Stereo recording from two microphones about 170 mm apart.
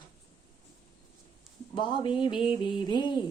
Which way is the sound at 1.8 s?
30° left (ahead or behind).